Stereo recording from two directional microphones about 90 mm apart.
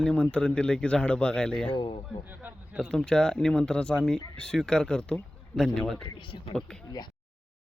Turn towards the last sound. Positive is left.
turn(degrees=10)  # may be behind; listen again after turning